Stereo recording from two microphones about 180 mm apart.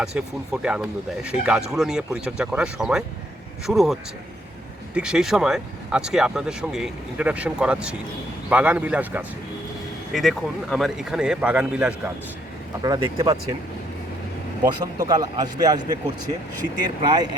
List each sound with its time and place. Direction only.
0.0 s speech: 5° right (ahead or behind)
4.9 s a man's voice: 5° right (ahead or behind)
12.8 s a man's voice: 20° right (ahead or behind)
14.6 s a man's voice: 20° right (ahead or behind)
17.0 s a man's voice: 25° right (ahead or behind)